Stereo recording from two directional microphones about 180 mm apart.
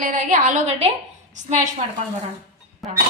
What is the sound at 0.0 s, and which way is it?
A woman's voice, 50° right (ahead or behind).